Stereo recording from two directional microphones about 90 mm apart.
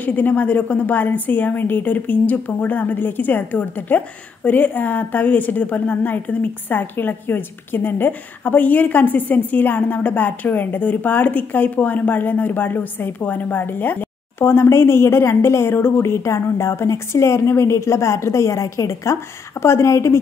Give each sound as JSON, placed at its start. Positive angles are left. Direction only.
{"t": 0.0, "sound": "a woman's voice", "side_deg": 20}